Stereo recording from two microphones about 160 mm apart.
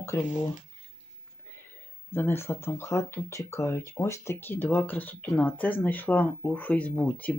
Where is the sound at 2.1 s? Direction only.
15° left (ahead or behind).